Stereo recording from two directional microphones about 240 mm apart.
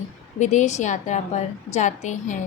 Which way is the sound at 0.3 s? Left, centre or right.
Left.